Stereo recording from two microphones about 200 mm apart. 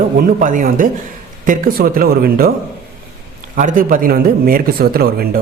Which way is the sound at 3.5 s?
40° right (ahead or behind).